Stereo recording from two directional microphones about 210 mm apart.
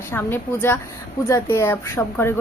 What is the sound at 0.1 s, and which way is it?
A woman's voice, 10° left (ahead or behind).